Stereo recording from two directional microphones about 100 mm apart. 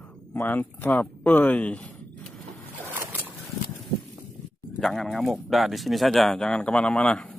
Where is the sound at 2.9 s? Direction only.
20° right (ahead or behind).